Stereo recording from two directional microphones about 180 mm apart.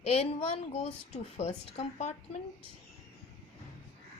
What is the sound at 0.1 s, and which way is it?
A woman's voice, 35° left (ahead or behind).